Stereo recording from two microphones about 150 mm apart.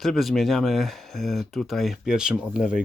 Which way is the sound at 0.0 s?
Centre (ahead or behind).